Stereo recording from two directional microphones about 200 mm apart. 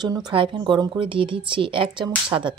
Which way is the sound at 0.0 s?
20° right (ahead or behind).